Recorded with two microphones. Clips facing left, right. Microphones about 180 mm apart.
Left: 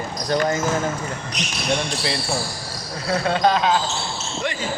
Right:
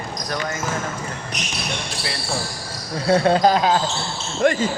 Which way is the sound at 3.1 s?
30° right (ahead or behind).